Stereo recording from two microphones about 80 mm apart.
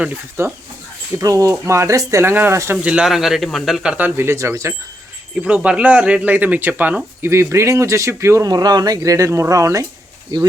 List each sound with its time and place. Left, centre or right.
0.4 s speech: right
1.1 s speech: right
2.8 s speech: centre
3.9 s speech: right
5.4 s speech: centre
7.3 s speech: right
8.4 s speech: right